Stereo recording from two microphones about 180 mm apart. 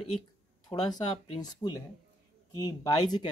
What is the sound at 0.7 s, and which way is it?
Speech, 25° left (ahead or behind).